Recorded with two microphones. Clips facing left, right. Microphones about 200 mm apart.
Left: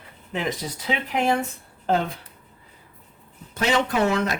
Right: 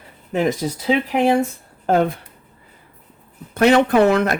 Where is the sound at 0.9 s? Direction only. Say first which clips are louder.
Right 6 dB; 35° right (ahead or behind).